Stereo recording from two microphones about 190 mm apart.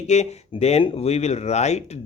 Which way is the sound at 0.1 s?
35° left (ahead or behind).